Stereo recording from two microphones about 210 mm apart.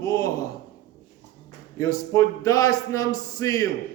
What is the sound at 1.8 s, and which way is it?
Speech, 15° left (ahead or behind).